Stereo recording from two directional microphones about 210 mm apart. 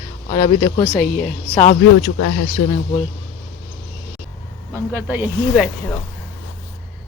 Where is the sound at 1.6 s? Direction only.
45° left (ahead or behind).